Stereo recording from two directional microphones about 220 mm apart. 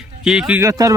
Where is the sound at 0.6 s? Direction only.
15° right (ahead or behind).